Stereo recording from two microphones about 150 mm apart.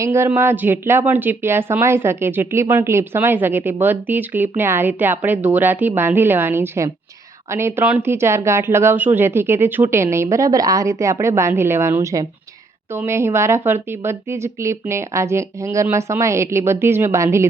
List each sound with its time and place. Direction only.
0.0 s speech: 15° right (ahead or behind)